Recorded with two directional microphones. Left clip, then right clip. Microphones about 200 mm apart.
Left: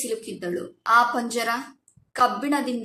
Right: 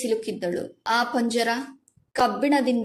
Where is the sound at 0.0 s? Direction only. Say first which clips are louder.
Right 4 dB; 25° right (ahead or behind).